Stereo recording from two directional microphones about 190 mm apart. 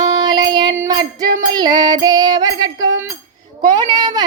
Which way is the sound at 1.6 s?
20° right (ahead or behind).